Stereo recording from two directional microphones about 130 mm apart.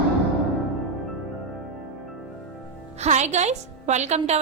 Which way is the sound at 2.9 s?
60° right (ahead or behind).